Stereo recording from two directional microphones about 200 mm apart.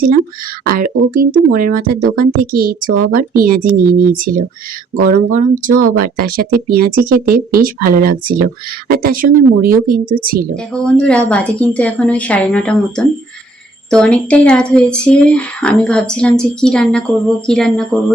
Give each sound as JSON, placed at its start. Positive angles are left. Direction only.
{"t": 0.7, "sound": "speech", "side_deg": -45}
{"t": 10.5, "sound": "a woman's voice", "side_deg": 5}
{"t": 13.9, "sound": "speech", "side_deg": 5}